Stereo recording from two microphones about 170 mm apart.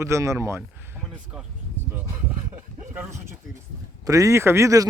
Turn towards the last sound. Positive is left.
turn(degrees=-20)  # may be behind; listen again after turning